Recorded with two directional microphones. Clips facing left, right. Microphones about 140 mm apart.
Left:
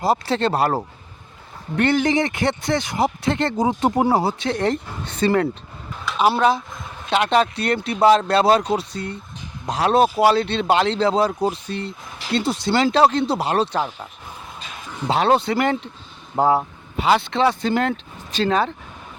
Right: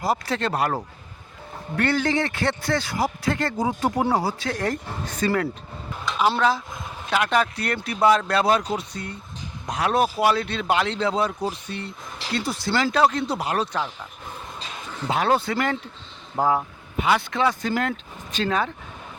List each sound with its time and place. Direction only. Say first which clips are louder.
0.0 s a man's voice: left 5 dB; 25° left (ahead or behind)
1.7 s a man's voice: left 4 dB; 20° left (ahead or behind)
12.3 s a man's voice: left 5 dB; 25° left (ahead or behind)
15.0 s a man's voice: left 4 dB; 25° left (ahead or behind)